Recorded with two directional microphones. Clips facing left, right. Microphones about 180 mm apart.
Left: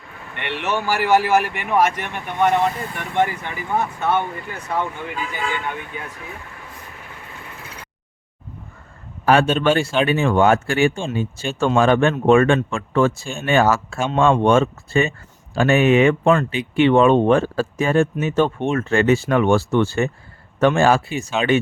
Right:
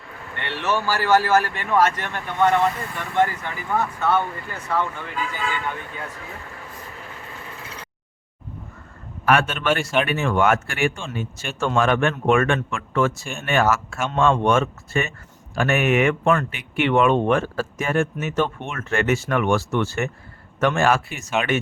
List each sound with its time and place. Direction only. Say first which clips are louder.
0.3 s speech: left 1 dB; 15° left (ahead or behind)
9.2 s speech: left 4 dB; 30° left (ahead or behind)